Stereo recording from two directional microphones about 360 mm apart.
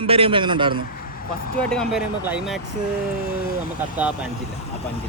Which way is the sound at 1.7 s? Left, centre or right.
Centre.